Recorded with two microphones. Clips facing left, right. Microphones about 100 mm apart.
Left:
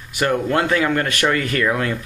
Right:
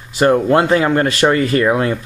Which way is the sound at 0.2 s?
30° right (ahead or behind).